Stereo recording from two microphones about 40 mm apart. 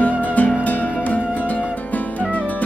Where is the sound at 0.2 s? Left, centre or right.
Left.